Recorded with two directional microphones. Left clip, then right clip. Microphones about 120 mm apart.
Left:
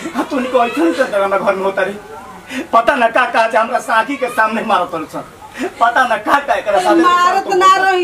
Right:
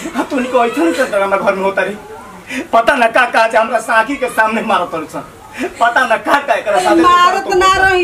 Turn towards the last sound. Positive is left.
turn(degrees=0)  # may be behind; listen again after turning